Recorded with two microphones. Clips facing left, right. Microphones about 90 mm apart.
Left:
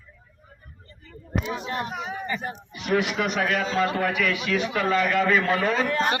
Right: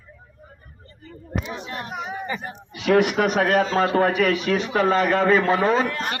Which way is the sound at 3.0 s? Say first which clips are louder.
Right 5 dB; 45° right (ahead or behind).